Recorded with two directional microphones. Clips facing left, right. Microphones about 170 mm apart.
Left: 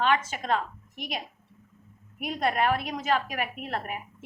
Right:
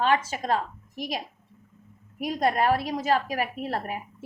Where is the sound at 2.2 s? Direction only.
35° right (ahead or behind).